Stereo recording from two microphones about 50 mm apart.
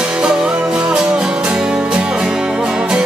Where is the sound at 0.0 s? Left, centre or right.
Centre.